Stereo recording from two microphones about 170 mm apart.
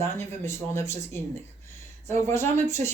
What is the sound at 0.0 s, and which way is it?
Speech, 15° left (ahead or behind).